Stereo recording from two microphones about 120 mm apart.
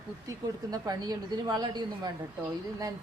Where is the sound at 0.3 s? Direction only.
30° right (ahead or behind).